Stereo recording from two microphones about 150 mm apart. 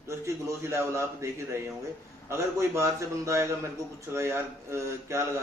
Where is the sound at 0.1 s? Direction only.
20° right (ahead or behind).